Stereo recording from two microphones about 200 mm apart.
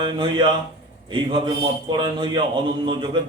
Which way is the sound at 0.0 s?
25° right (ahead or behind).